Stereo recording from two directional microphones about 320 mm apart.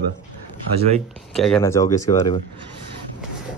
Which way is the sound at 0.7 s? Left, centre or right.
Centre.